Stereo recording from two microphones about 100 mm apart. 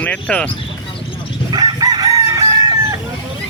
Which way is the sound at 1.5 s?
40° right (ahead or behind).